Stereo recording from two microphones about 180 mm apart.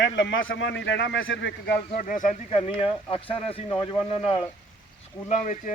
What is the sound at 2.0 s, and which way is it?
Speech, 45° left (ahead or behind).